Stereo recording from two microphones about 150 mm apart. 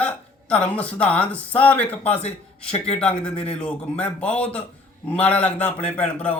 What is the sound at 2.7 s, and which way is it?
Speech, 40° left (ahead or behind).